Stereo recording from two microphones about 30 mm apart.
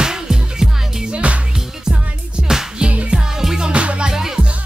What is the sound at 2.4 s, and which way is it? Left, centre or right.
Music, centre.